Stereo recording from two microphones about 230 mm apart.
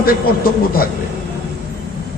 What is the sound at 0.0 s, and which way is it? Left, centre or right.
Speech, left.